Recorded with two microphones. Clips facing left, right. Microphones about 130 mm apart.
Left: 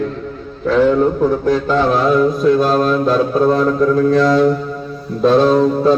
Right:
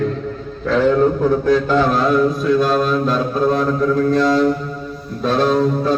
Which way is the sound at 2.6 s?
35° left (ahead or behind).